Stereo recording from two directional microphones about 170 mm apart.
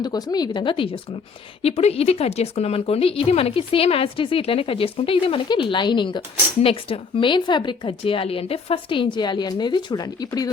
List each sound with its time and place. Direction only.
0.0 s a woman's voice: 20° left (ahead or behind)